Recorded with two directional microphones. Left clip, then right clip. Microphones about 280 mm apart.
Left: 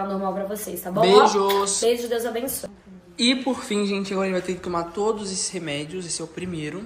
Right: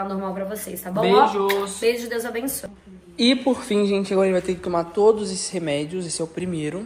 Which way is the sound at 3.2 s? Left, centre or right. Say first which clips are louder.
Right 2 dB; centre.